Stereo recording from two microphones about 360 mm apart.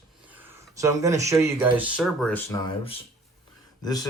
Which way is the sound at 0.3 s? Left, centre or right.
Centre.